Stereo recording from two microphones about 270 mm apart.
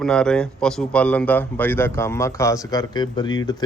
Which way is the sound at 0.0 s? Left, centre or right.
Centre.